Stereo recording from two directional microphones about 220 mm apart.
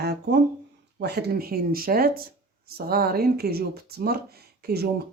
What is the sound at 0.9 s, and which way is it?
Speech, 45° right (ahead or behind).